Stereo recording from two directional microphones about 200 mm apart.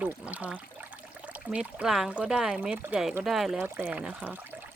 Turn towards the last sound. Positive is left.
turn(degrees=-10)  # may be behind; listen again after turning